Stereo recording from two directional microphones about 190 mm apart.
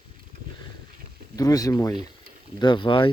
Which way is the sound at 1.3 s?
20° left (ahead or behind).